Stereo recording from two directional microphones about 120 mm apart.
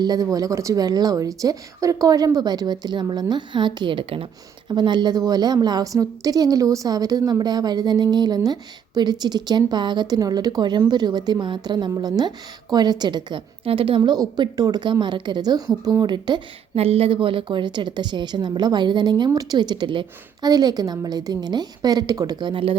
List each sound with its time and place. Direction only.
0.0 s a woman's voice: 30° right (ahead or behind); by 4.3 s 50° right (ahead or behind)
4.7 s a woman's voice: 40° right (ahead or behind)
16.7 s a woman's voice: 55° right (ahead or behind); by 22.7 s 40° right (ahead or behind)